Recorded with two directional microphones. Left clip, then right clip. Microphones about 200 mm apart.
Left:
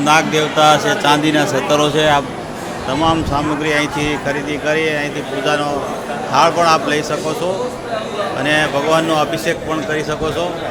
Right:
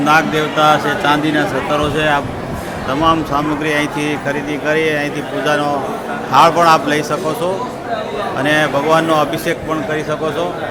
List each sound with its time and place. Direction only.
0.0 s a man's voice: 10° left (ahead or behind)